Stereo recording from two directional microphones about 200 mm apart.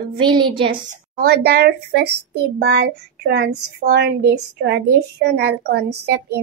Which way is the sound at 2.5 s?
60° right (ahead or behind).